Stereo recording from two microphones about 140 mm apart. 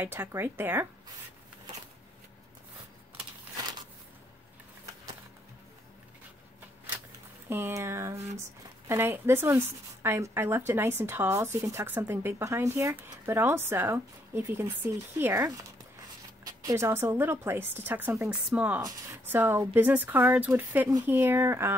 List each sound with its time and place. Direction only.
0.0 s speech: 15° right (ahead or behind)
7.4 s a woman's voice: 15° right (ahead or behind)
18.8 s speech: 25° right (ahead or behind)
19.2 s speech: 15° right (ahead or behind)